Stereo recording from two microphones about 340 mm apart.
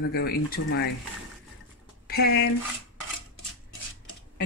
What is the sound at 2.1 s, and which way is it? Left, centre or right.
Speech, left.